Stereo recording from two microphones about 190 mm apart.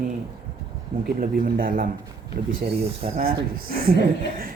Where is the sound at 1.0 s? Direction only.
50° right (ahead or behind).